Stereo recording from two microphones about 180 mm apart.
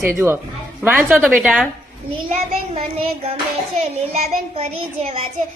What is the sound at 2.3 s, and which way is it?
A child's voice, 35° right (ahead or behind).